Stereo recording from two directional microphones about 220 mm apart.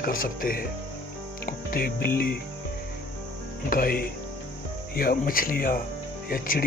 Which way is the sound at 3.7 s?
40° left (ahead or behind).